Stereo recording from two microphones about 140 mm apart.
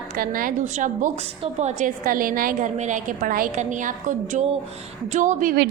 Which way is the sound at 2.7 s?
60° right (ahead or behind).